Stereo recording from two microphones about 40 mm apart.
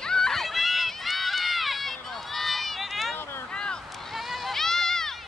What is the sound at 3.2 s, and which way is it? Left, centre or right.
Vehicle, left.